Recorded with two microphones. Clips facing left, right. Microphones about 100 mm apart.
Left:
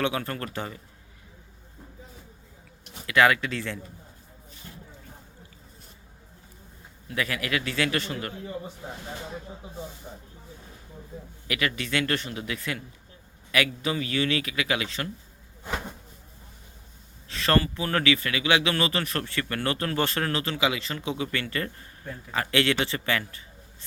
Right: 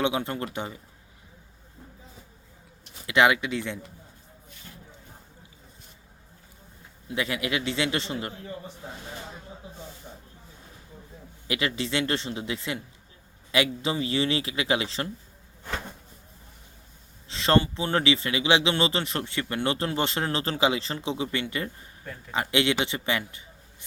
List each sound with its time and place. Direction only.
0.0 s speech: 20° right (ahead or behind)
3.1 s speech: 20° right (ahead or behind)
7.1 s speech: 20° right (ahead or behind)
10.1 s speech: 10° left (ahead or behind)
11.4 s speech: 25° right (ahead or behind)
17.2 s speech: 25° right (ahead or behind)